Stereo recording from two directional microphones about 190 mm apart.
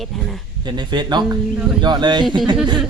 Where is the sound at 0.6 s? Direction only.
25° right (ahead or behind).